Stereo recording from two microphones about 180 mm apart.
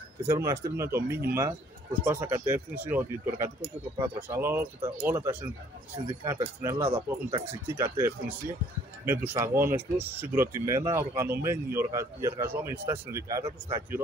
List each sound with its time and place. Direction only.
0.3 s speech: 15° right (ahead or behind)
6.9 s speech: 30° right (ahead or behind)
7.6 s speech: 15° right (ahead or behind)